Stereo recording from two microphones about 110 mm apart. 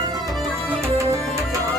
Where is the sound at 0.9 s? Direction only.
25° right (ahead or behind).